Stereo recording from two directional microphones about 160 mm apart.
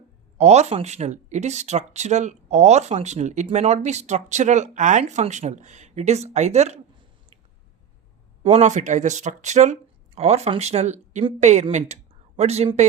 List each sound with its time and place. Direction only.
0.3 s speech: 45° right (ahead or behind)
8.4 s speech: 45° right (ahead or behind)